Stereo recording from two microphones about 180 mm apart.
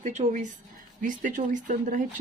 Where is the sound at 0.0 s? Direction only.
40° right (ahead or behind).